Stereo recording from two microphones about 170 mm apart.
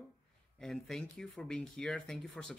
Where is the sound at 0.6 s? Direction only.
5° left (ahead or behind).